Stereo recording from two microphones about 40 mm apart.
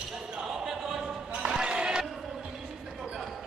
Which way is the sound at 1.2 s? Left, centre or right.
Right.